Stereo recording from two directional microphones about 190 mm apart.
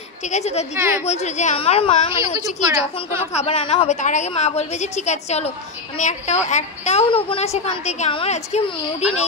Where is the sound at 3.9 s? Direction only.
40° left (ahead or behind).